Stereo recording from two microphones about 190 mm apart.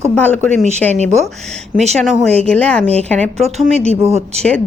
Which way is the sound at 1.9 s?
Centre (ahead or behind).